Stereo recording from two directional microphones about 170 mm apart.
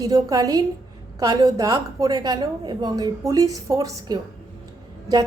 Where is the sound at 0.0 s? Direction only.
20° right (ahead or behind).